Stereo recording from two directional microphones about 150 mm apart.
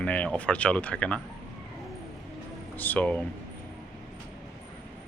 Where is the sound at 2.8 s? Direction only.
10° left (ahead or behind).